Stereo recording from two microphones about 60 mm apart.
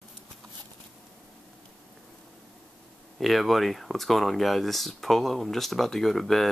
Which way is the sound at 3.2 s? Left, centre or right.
Centre.